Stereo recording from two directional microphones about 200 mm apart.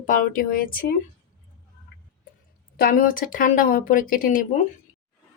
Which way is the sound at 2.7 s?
45° left (ahead or behind).